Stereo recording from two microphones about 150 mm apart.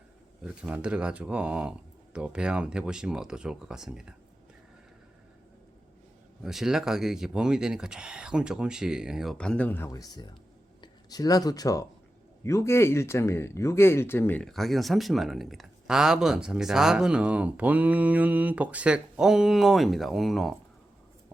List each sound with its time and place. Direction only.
0.4 s speech: 5° right (ahead or behind)
6.4 s speech: 5° right (ahead or behind)